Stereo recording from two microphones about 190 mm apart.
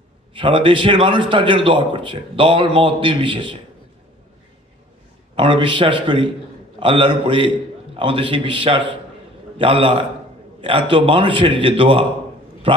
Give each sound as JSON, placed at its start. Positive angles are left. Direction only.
{"t": 0.3, "sound": "a man's voice", "side_deg": -25}
{"t": 5.3, "sound": "a man's voice", "side_deg": -25}